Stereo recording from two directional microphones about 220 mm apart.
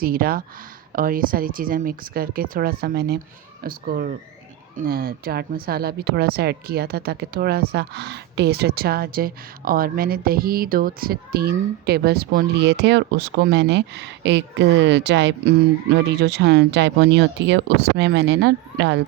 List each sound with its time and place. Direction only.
0.0 s speech: 40° right (ahead or behind)